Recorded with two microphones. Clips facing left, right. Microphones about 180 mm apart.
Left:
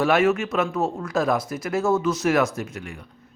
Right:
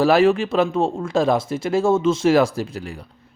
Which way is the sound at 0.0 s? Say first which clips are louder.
Right 4 dB; 30° right (ahead or behind).